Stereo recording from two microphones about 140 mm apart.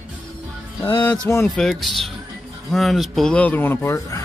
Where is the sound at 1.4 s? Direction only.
5° left (ahead or behind).